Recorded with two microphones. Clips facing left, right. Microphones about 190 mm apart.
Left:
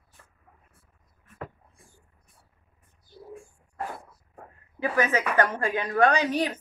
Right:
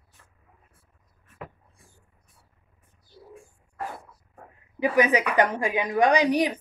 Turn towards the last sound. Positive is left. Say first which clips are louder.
# right 3 dB
turn(degrees=-15)  # may be behind; listen again after turning